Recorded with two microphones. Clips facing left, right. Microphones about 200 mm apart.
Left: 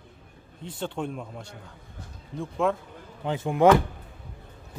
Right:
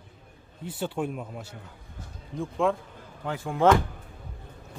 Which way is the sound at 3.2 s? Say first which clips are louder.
Left 4 dB; 20° left (ahead or behind).